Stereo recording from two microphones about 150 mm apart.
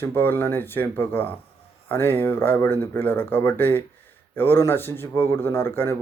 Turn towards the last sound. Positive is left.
turn(degrees=15)  # may be behind; listen again after turning